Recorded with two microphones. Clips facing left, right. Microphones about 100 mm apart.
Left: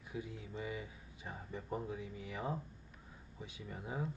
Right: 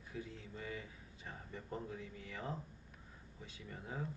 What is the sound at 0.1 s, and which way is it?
Speech, 15° left (ahead or behind).